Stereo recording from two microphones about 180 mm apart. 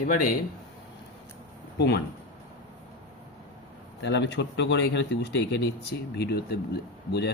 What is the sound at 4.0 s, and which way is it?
Speech, 80° left.